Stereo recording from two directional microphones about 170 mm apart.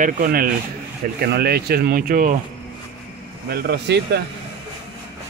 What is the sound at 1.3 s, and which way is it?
Speech, 70° right (ahead or behind).